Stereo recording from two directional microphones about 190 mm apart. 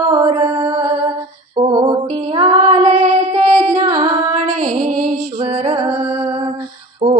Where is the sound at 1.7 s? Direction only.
25° right (ahead or behind).